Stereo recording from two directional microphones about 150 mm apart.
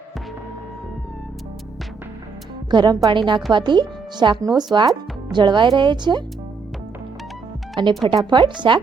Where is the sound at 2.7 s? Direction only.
25° right (ahead or behind).